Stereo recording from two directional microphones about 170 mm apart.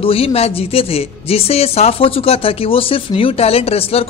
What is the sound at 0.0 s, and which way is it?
A man's voice, 35° left (ahead or behind).